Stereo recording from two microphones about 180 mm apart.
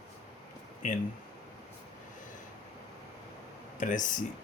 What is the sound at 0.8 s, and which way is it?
Speech, 45° left (ahead or behind).